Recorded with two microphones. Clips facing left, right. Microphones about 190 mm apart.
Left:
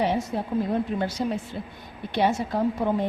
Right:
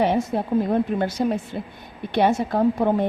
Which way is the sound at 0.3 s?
60° right (ahead or behind).